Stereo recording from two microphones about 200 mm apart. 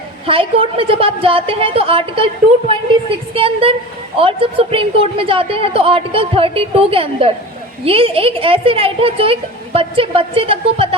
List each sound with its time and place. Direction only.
0.3 s a woman's voice: 25° right (ahead or behind)
3.3 s a woman's voice: 25° right (ahead or behind)